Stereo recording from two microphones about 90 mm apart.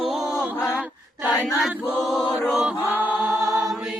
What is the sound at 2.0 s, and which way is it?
Chant, 5° right (ahead or behind).